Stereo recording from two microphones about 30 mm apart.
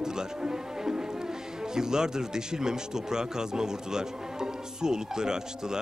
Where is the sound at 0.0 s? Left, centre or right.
Right.